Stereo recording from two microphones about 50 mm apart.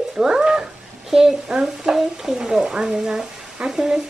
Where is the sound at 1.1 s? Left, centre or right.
Centre.